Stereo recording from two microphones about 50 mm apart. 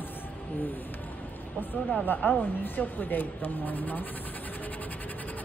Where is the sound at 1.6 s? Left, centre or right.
Left.